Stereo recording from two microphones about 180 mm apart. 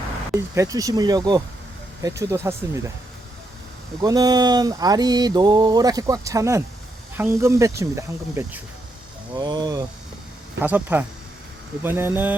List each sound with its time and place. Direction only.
0.3 s mantra: 15° right (ahead or behind)
2.0 s speech: 15° right (ahead or behind)
4.0 s mantra: 20° right (ahead or behind)
7.2 s speech: 15° right (ahead or behind)
9.3 s mantra: 25° right (ahead or behind)
10.6 s speech: 10° right (ahead or behind)